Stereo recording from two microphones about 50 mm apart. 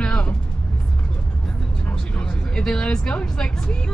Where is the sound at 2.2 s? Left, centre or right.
Centre.